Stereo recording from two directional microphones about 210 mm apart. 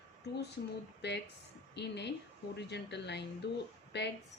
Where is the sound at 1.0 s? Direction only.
55° left (ahead or behind).